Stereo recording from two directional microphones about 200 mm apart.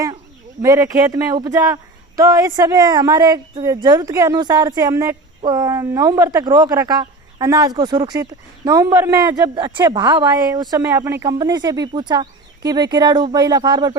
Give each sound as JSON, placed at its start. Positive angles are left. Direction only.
{"t": 0.6, "sound": "speech", "side_deg": -15}